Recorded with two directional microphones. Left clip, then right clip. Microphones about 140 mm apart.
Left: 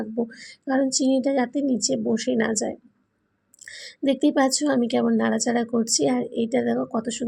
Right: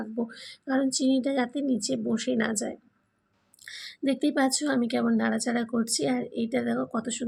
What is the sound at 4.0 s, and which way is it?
Speech, 20° left (ahead or behind).